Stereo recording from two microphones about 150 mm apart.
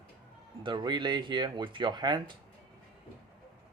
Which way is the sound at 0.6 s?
30° right (ahead or behind).